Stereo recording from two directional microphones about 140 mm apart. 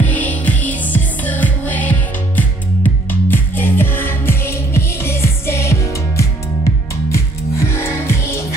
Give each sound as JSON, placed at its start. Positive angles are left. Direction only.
{"t": 0.0, "sound": "music", "side_deg": 10}